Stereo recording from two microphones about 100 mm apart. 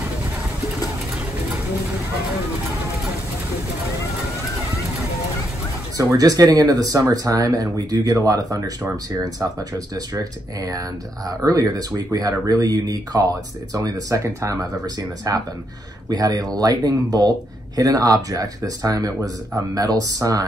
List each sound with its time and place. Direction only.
5.9 s speech: 40° right (ahead or behind)